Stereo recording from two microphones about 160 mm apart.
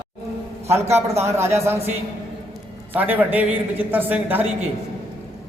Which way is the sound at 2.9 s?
10° right (ahead or behind).